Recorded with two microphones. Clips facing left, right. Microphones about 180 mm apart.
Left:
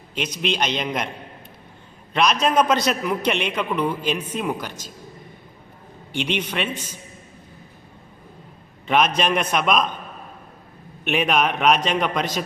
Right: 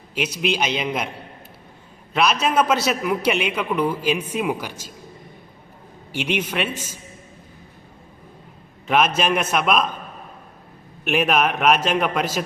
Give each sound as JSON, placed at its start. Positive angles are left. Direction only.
{"t": 0.1, "sound": "a man's voice", "side_deg": -5}
{"t": 2.1, "sound": "a man's voice", "side_deg": -5}
{"t": 6.1, "sound": "a man's voice", "side_deg": -10}
{"t": 8.9, "sound": "a man's voice", "side_deg": -5}
{"t": 11.0, "sound": "a man's voice", "side_deg": 0}